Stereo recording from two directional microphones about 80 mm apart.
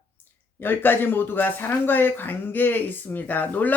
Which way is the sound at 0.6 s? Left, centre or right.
Left.